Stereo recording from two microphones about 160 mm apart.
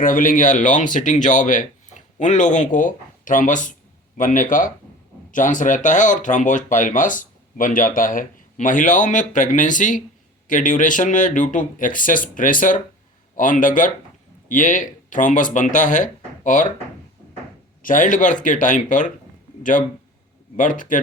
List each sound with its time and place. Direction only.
0.0 s speech: 60° left (ahead or behind)
17.8 s speech: 55° left (ahead or behind)
20.6 s speech: 55° left (ahead or behind)